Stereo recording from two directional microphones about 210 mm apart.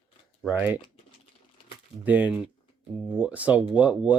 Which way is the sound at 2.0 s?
10° right (ahead or behind).